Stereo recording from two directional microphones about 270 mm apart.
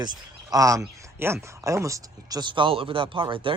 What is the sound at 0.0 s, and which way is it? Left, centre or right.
A man's voice, centre.